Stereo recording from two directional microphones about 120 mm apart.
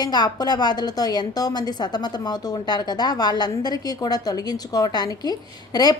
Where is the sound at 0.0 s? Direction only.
35° left (ahead or behind).